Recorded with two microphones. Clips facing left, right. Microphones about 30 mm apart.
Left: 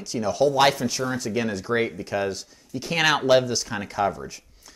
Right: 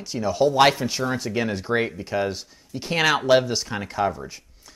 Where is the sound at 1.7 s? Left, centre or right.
Centre.